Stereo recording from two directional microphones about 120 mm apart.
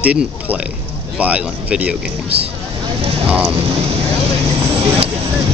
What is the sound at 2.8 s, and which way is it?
Speech, 50° right (ahead or behind).